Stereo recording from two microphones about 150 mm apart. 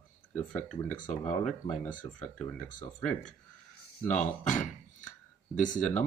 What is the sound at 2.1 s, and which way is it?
Speech, 10° left (ahead or behind).